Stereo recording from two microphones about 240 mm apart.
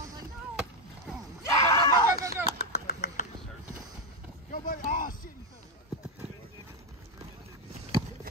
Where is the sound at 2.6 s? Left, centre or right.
Left.